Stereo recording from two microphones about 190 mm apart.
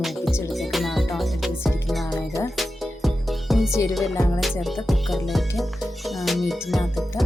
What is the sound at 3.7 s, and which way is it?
Music, 15° left (ahead or behind).